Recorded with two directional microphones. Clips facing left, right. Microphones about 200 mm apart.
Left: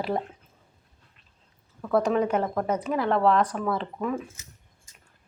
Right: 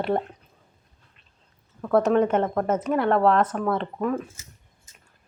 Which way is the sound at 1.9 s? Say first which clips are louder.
Right 3 dB; centre (ahead or behind).